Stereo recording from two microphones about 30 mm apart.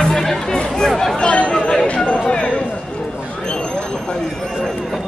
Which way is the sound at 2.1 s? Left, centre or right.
Left.